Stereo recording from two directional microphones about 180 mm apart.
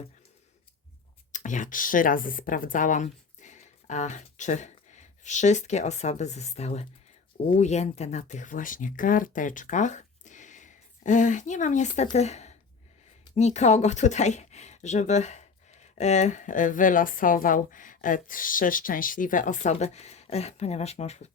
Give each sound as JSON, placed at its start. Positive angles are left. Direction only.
{"t": 1.3, "sound": "a woman's voice", "side_deg": 45}